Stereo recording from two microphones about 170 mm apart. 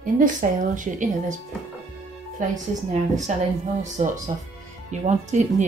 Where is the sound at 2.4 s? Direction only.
50° right (ahead or behind).